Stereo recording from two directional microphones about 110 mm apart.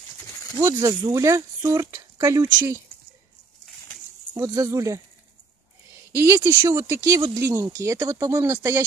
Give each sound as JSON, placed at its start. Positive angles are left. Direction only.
{"t": 0.6, "sound": "speech", "side_deg": -30}
{"t": 4.3, "sound": "speech", "side_deg": -35}
{"t": 6.1, "sound": "speech", "side_deg": -25}